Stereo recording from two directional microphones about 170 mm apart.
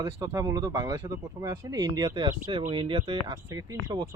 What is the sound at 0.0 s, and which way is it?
Speech, 25° right (ahead or behind).